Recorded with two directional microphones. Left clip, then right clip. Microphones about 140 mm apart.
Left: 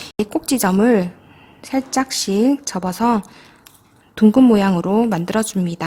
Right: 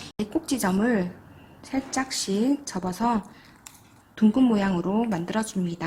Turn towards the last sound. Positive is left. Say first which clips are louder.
# left 8 dB
turn(degrees=50)  # may be behind; listen again after turning